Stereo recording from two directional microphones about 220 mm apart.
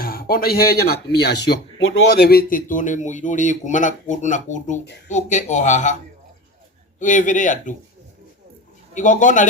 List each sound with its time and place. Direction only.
0.0 s a man's voice: 40° left (ahead or behind)
7.0 s a man's voice: 35° left (ahead or behind)
9.0 s a man's voice: 35° left (ahead or behind)